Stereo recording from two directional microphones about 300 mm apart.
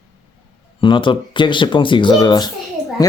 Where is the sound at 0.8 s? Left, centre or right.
Centre.